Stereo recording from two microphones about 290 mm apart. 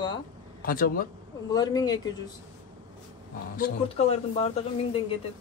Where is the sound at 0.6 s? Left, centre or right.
Left.